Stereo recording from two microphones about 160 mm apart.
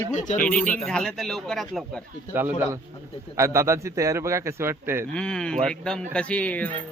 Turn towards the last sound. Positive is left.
turn(degrees=10)  # may be behind; listen again after turning